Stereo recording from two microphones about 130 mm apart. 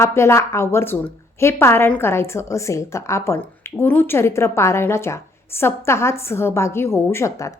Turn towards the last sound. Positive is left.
turn(degrees=25)  # may be behind; listen again after turning